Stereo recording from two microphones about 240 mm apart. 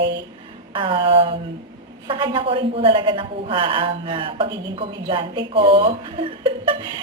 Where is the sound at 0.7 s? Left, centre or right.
Right.